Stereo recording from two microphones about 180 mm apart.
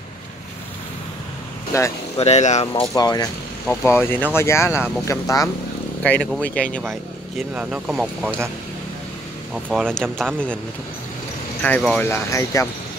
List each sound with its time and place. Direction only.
1.7 s speech: 15° left (ahead or behind)
2.1 s speech: 40° left (ahead or behind)
2.7 s speech: 25° left (ahead or behind)
6.0 s speech: 5° left (ahead or behind)
9.8 s speech: 5° left (ahead or behind)
11.6 s speech: 5° left (ahead or behind)
12.1 s speech: 15° left (ahead or behind)